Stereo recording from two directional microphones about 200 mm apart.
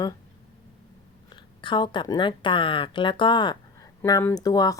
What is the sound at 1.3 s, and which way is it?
Speech, 25° left (ahead or behind).